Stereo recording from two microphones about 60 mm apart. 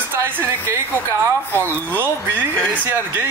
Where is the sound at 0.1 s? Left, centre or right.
Right.